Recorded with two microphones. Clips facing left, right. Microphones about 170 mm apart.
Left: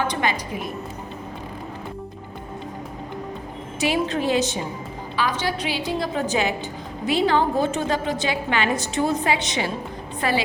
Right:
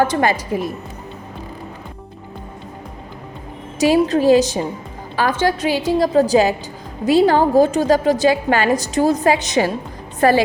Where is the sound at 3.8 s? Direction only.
40° right (ahead or behind).